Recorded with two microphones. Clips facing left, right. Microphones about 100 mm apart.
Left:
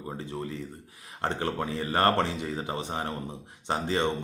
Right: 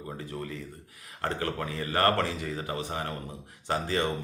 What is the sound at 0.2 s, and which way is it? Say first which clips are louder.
Speech: left 2 dB; 25° left (ahead or behind).